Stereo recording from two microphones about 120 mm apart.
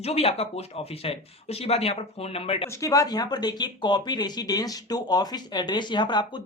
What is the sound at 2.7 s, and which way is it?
Speech, 30° left (ahead or behind).